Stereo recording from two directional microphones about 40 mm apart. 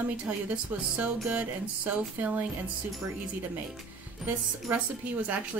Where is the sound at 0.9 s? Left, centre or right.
Right.